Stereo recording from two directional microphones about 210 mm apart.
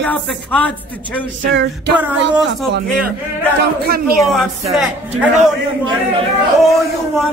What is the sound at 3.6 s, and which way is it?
Speech, 45° right (ahead or behind).